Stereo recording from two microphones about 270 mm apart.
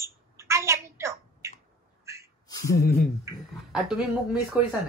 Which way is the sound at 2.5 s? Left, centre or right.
Centre.